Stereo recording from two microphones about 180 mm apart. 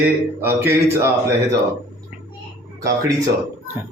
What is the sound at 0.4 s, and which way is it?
Speech, 15° right (ahead or behind).